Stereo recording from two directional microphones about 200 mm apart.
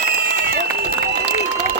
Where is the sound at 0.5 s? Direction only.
55° right (ahead or behind).